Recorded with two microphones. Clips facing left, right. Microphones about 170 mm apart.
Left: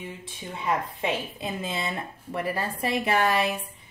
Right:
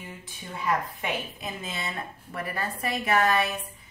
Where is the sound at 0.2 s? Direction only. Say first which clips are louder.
Even; 25° left (ahead or behind).